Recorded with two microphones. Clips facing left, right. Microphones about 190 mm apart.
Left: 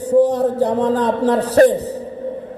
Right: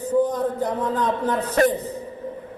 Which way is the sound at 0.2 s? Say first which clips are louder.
Left 7 dB; 75° left (ahead or behind).